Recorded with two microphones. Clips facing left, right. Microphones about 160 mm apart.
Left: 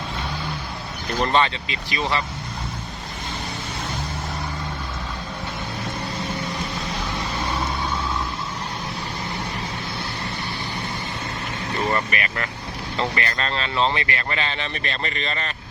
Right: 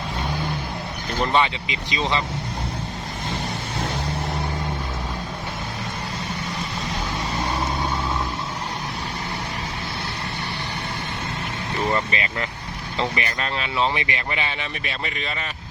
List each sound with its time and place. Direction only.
1.2 s speech: 10° right (ahead or behind)
11.9 s speech: 20° right (ahead or behind)